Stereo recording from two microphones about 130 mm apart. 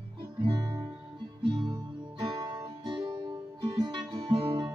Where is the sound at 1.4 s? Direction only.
40° right (ahead or behind).